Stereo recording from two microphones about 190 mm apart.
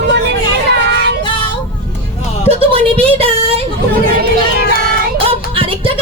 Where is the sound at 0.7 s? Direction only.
60° right (ahead or behind).